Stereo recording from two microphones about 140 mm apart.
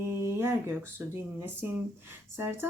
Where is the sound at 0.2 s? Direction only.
15° right (ahead or behind).